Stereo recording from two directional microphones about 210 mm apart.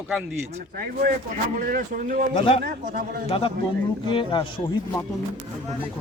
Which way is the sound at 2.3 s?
25° left (ahead or behind).